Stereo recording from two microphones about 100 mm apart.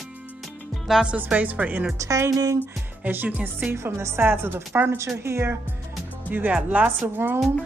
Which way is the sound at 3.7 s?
25° right (ahead or behind).